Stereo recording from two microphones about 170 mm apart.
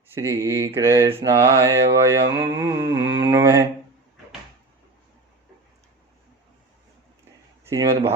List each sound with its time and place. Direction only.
0.1 s mantra: 15° right (ahead or behind)
7.7 s mantra: 15° right (ahead or behind)